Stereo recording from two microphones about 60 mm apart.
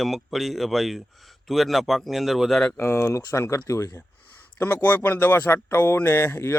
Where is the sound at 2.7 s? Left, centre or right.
Left.